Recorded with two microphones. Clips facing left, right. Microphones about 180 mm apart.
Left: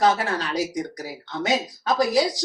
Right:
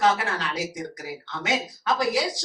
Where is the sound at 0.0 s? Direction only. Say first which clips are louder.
Left 2 dB; 40° left (ahead or behind).